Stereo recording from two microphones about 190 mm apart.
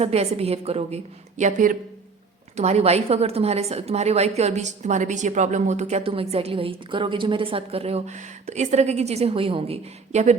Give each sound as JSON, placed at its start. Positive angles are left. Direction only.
{"t": 0.0, "sound": "a woman's voice", "side_deg": -35}